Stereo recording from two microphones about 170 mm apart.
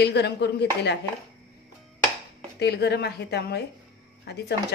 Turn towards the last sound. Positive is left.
turn(degrees=80)